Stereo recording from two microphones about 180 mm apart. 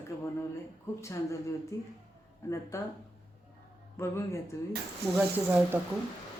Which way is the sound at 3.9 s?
15° left (ahead or behind).